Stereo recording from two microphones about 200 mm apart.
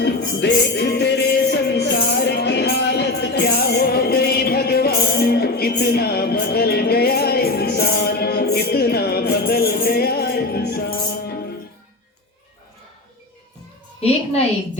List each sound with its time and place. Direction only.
0.0 s music: 60° left (ahead or behind)